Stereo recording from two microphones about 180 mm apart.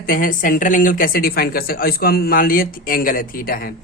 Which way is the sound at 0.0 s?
50° left (ahead or behind).